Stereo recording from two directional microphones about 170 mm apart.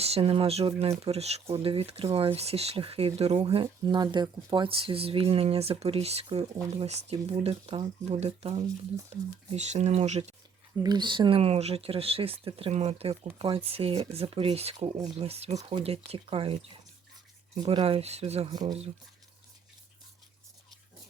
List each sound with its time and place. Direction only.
0.0 s speech: 35° right (ahead or behind)
10.8 s speech: 25° right (ahead or behind)
14.9 s speech: 20° right (ahead or behind)
15.3 s speech: 35° right (ahead or behind)
17.6 s speech: 30° right (ahead or behind)